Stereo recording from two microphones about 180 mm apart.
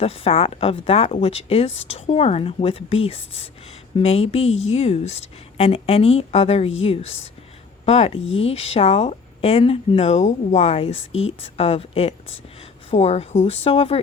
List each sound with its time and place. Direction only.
0.0 s speech: 35° left (ahead or behind)
8.2 s speech: 90° left
8.4 s speech: 35° left (ahead or behind)